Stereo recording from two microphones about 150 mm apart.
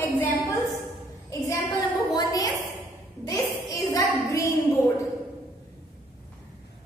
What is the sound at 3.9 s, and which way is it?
Child singing, 20° left (ahead or behind).